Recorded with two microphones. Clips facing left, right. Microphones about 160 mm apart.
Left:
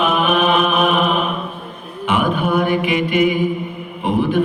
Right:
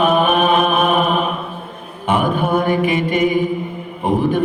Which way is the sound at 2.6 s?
40° right (ahead or behind).